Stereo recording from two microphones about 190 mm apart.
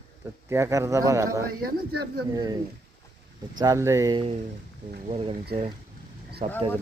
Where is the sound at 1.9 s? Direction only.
55° right (ahead or behind).